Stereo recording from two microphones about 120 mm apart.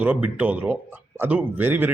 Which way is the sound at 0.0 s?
15° right (ahead or behind).